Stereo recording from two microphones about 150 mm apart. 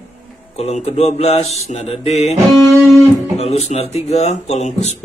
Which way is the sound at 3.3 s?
45° left (ahead or behind).